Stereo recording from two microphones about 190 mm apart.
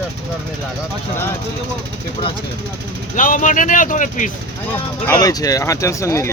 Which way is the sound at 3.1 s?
45° left (ahead or behind).